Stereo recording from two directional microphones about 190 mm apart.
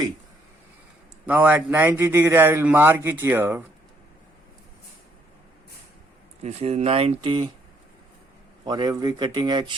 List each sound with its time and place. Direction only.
1.3 s a man's voice: 10° right (ahead or behind)
6.4 s speech: 35° right (ahead or behind)
8.6 s speech: 20° right (ahead or behind)